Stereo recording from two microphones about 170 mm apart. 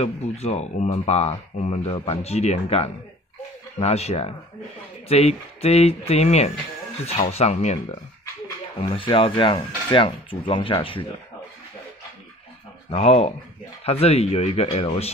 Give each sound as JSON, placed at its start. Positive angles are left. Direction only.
{"t": 0.0, "sound": "speech", "side_deg": 40}
{"t": 12.9, "sound": "speech", "side_deg": 40}